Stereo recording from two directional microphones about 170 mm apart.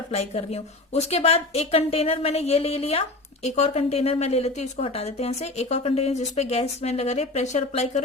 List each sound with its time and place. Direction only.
0.1 s speech: 40° left (ahead or behind)